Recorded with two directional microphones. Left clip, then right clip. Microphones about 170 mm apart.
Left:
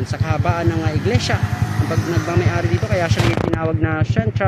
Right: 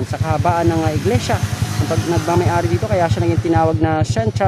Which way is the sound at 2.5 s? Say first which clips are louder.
Right 3 dB; 15° right (ahead or behind).